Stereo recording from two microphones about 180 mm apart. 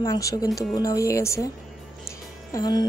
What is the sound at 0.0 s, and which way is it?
A woman's voice, 20° left (ahead or behind).